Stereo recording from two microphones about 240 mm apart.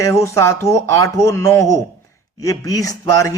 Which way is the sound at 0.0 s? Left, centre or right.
Centre.